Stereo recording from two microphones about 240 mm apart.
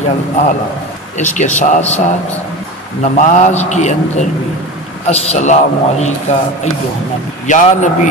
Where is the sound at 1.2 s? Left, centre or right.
Left.